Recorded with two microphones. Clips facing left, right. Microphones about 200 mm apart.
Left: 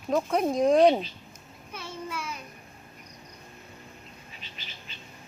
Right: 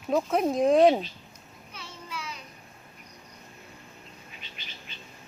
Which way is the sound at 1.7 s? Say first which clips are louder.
Left 5 dB; 55° left (ahead or behind).